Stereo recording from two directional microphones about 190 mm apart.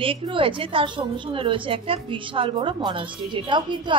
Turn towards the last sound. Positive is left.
turn(degrees=-25)  # may be behind; listen again after turning